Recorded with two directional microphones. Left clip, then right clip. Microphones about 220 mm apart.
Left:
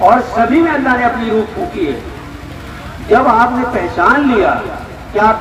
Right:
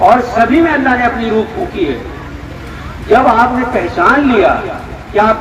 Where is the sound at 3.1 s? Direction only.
25° right (ahead or behind).